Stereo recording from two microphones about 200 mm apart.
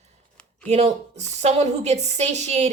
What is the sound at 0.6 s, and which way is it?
A woman's voice, 30° right (ahead or behind).